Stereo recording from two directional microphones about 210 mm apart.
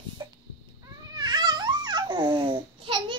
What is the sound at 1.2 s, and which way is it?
Babbling, 20° right (ahead or behind).